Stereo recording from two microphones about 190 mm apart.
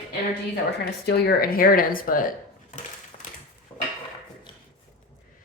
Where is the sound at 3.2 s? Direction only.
45° left (ahead or behind).